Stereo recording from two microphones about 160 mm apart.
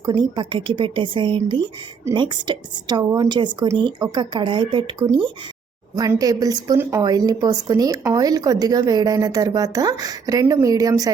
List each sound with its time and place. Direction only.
0.0 s speech: 25° right (ahead or behind)